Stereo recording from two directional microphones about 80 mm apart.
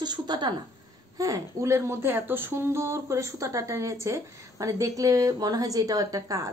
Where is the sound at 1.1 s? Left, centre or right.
Right.